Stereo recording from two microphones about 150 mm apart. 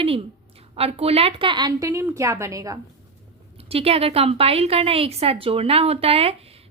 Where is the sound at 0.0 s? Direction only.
40° right (ahead or behind); by 2.7 s 20° right (ahead or behind).